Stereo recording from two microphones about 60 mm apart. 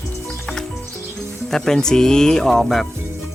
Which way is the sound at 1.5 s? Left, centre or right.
Centre.